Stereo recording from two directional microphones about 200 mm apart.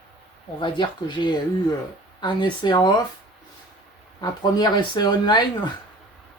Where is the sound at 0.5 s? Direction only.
20° left (ahead or behind).